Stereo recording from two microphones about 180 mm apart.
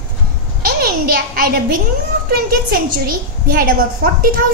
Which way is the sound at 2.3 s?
55° right (ahead or behind).